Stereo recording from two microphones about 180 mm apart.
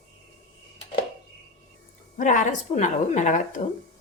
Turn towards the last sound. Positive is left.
turn(degrees=45)  # may be behind; listen again after turning